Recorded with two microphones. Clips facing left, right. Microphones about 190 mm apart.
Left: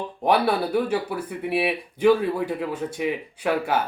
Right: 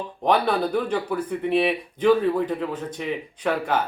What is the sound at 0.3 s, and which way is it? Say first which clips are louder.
Speech: even; 10° left (ahead or behind).